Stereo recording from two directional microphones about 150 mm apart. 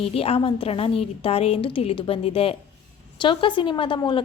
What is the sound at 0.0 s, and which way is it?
A woman's voice, 40° left (ahead or behind).